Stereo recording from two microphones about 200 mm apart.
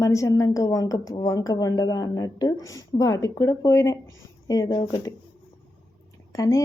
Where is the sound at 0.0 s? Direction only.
15° left (ahead or behind).